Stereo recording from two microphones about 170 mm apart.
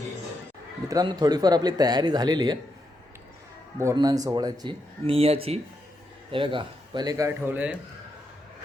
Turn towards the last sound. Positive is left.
turn(degrees=-10)  # may be behind; listen again after turning